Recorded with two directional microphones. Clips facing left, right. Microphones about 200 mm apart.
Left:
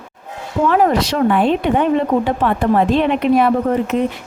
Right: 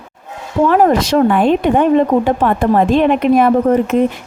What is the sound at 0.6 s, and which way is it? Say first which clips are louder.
A woman's voice: right 3 dB; 45° right (ahead or behind).